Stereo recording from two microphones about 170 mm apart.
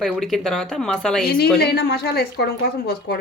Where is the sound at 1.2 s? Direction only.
65° left (ahead or behind).